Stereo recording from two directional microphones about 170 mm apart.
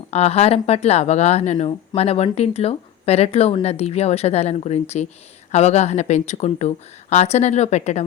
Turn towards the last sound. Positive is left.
turn(degrees=40)  # may be behind; listen again after turning